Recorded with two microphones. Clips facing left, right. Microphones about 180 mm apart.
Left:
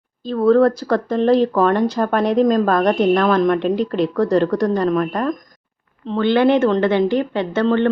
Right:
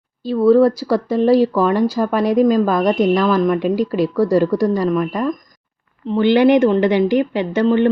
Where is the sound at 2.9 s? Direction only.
60° left (ahead or behind).